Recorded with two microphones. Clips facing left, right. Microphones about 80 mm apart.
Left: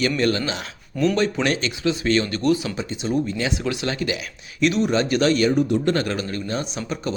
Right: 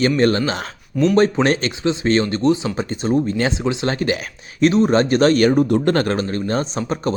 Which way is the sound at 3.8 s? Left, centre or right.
Right.